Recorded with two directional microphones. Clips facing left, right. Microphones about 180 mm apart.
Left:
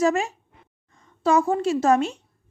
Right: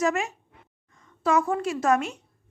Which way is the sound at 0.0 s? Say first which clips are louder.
Left 4 dB; 30° left (ahead or behind).